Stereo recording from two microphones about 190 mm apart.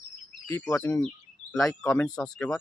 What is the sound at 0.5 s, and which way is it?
Speech, 15° left (ahead or behind).